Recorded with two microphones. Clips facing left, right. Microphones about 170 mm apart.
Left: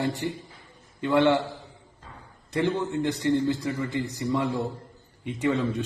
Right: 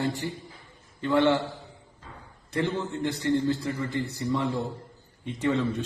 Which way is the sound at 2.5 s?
15° left (ahead or behind).